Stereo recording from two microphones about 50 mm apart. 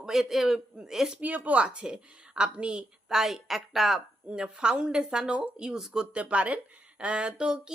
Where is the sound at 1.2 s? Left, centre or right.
Right.